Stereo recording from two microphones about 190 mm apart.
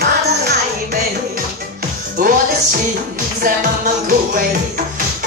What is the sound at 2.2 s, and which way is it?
Speech, 45° right (ahead or behind).